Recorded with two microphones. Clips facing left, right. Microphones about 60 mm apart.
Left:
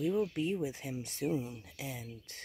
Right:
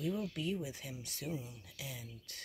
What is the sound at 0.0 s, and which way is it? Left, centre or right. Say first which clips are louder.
Speech: left 6 dB; left.